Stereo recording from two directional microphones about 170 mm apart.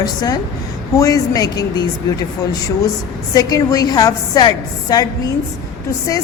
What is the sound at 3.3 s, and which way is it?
A woman's voice, 20° left (ahead or behind).